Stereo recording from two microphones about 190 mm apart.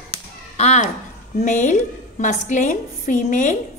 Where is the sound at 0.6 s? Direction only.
35° left (ahead or behind).